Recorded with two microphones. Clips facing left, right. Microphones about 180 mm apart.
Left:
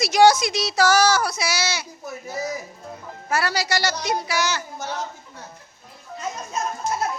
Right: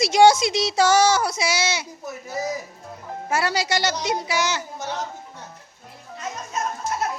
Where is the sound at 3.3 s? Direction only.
20° right (ahead or behind).